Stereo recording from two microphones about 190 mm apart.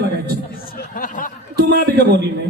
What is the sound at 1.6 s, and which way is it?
Speech, 55° right (ahead or behind).